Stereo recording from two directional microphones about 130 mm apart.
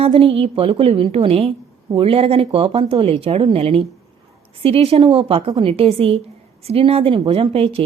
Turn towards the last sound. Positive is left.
turn(degrees=-45)  # may be behind; listen again after turning